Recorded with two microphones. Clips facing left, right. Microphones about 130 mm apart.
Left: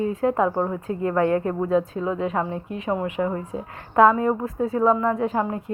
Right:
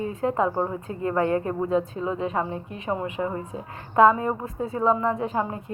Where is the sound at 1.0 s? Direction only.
25° right (ahead or behind).